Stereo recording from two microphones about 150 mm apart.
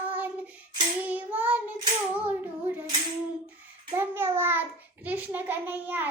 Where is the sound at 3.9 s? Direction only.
15° right (ahead or behind).